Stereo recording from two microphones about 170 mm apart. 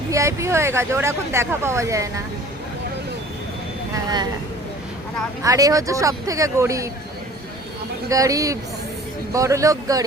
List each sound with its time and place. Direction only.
0.1 s speech: 15° right (ahead or behind)
5.4 s speech: 20° right (ahead or behind)
8.1 s speech: 20° right (ahead or behind)